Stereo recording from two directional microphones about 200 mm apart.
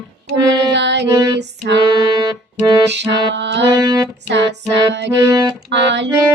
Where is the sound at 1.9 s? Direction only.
20° right (ahead or behind).